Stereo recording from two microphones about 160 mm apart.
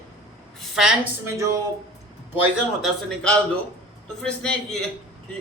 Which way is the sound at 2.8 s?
5° left (ahead or behind).